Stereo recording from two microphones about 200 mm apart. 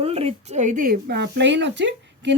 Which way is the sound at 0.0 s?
30° right (ahead or behind).